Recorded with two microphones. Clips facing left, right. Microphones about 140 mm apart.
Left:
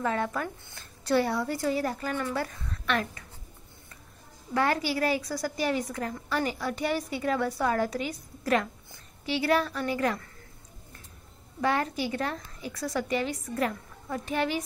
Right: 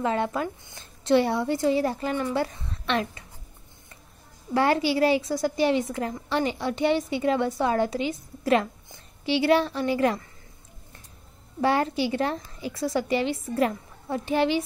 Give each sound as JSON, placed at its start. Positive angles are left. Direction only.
{"t": 0.0, "sound": "a woman's voice", "side_deg": -25}
{"t": 4.6, "sound": "a woman's voice", "side_deg": -30}
{"t": 11.6, "sound": "a woman's voice", "side_deg": -30}